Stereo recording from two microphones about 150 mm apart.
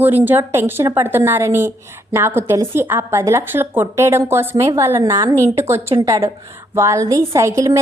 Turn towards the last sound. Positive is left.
turn(degrees=-20)  # may be behind; listen again after turning